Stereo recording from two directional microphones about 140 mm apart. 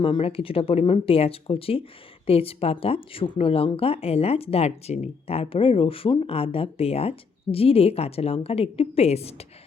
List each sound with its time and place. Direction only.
0.0 s speech: 40° left (ahead or behind)